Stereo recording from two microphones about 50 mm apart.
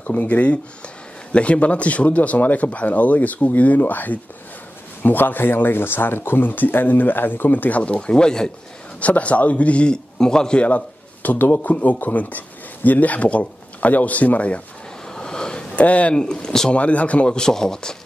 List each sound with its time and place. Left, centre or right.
0.0 s speech: left
9.0 s speech: left
10.1 s a man's voice: centre
11.5 s speech: left
15.0 s a sound: centre
16.2 s speech: centre
16.7 s speech: left